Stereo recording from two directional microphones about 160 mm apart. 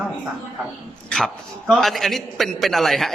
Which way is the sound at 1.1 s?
5° left (ahead or behind).